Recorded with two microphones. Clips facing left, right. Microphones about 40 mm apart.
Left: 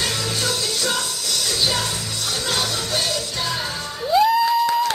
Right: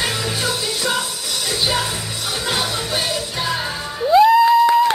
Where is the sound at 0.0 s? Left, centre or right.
Centre.